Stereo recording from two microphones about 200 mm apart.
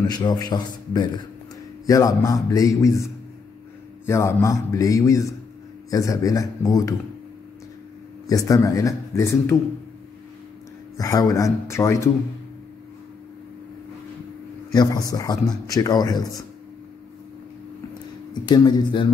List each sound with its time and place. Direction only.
0.0 s speech: 20° left (ahead or behind)
8.3 s speech: 15° left (ahead or behind)
11.0 s speech: 15° left (ahead or behind)
14.7 s speech: 20° left (ahead or behind)
18.3 s speech: 20° left (ahead or behind)